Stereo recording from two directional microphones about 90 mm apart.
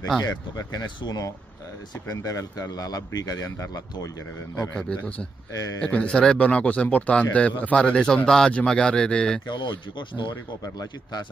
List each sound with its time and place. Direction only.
0.2 s speech: 45° left (ahead or behind)
4.7 s speech: 10° left (ahead or behind)
9.5 s speech: 60° left (ahead or behind)
10.3 s speech: 40° left (ahead or behind)